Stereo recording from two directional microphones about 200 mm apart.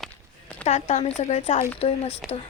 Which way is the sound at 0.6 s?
35° left (ahead or behind).